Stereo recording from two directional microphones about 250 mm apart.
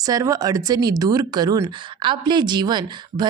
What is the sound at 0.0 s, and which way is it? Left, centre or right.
Speech, centre.